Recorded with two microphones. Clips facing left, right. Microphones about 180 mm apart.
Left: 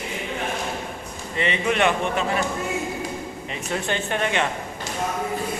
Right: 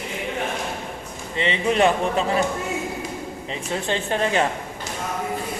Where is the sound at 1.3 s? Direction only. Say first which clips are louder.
Right 2 dB; 25° right (ahead or behind).